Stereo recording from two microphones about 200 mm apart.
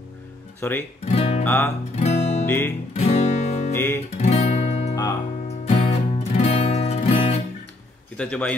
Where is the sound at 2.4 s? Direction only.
10° left (ahead or behind).